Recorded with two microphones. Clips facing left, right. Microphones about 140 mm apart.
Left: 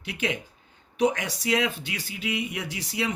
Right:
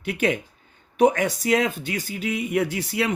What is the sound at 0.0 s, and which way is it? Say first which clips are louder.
Speech: right 7 dB; 50° right (ahead or behind).